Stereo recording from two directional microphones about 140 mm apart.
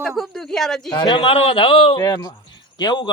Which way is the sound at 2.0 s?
25° left (ahead or behind).